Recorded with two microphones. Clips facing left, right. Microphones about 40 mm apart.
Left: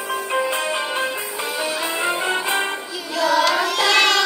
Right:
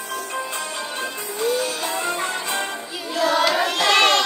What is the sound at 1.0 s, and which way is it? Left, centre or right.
Music, left.